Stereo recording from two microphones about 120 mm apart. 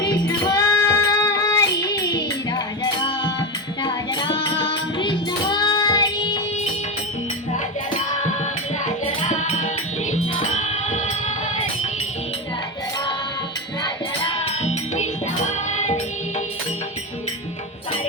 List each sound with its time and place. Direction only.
0.0 s music: 35° left (ahead or behind)
9.3 s music: 80° left
14.4 s music: 65° left (ahead or behind)